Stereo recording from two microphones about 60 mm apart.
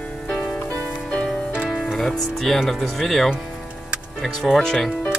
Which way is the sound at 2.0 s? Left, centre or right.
Centre.